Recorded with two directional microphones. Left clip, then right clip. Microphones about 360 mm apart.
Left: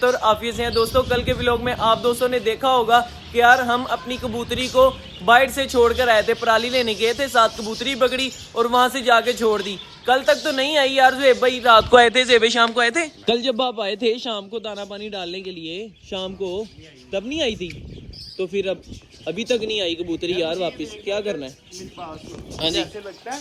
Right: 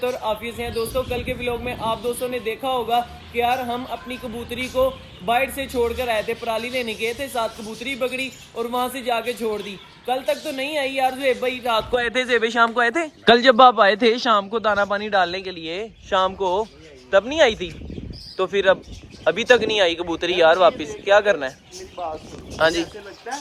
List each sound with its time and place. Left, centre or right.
0.0 s a man's voice: centre
12.1 s a man's voice: centre
13.2 s a man's voice: centre
22.7 s a man's voice: centre